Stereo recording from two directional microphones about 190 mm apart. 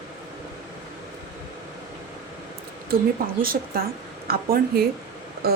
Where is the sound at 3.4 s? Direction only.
50° right (ahead or behind).